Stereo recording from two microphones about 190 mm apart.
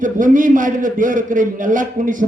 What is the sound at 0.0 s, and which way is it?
A man's voice, 45° right (ahead or behind).